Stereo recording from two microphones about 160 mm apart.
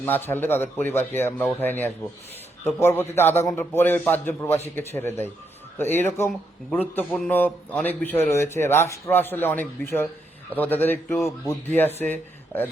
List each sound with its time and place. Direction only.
0.0 s a man's voice: 10° left (ahead or behind)